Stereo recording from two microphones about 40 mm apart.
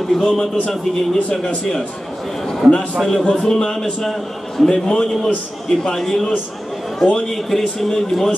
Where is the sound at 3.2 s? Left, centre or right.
Left.